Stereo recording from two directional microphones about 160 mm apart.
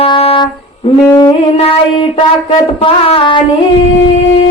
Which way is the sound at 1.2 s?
35° left (ahead or behind).